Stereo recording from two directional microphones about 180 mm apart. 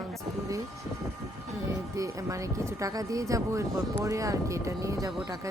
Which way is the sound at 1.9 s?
20° right (ahead or behind).